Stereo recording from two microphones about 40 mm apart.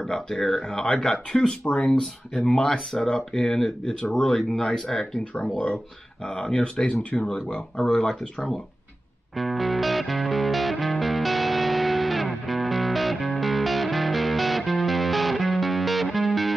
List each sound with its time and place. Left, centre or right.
0.0 s speech: centre
2.3 s speech: centre
6.2 s speech: left
9.4 s music: centre